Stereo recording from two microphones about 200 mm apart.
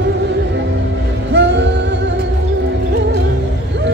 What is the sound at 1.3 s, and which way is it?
Music, 60° right (ahead or behind).